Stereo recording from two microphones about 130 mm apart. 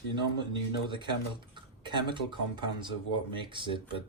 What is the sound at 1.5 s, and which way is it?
Speech, 35° right (ahead or behind).